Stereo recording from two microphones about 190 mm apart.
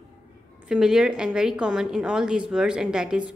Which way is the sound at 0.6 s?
5° right (ahead or behind).